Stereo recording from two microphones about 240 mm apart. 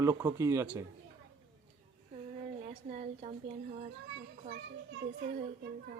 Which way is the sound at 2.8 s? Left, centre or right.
Right.